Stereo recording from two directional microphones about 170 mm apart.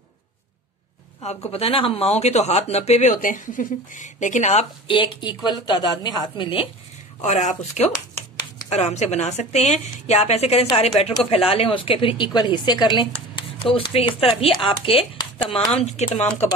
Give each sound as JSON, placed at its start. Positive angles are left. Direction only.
{"t": 1.2, "sound": "a woman's voice", "side_deg": 40}
{"t": 4.8, "sound": "a woman's voice", "side_deg": 30}
{"t": 7.2, "sound": "a woman's voice", "side_deg": 40}
{"t": 15.8, "sound": "a woman's voice", "side_deg": 40}